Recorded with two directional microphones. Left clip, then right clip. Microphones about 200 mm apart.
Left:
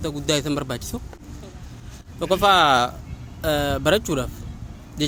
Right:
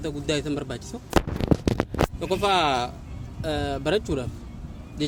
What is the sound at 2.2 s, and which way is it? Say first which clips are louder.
Speech: left 7 dB; 40° left (ahead or behind).